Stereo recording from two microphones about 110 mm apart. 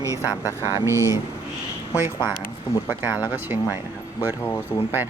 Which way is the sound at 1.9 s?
20° right (ahead or behind).